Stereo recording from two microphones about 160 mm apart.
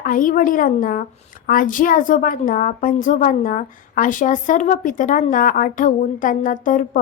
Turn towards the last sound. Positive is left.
turn(degrees=55)  # may be behind; listen again after turning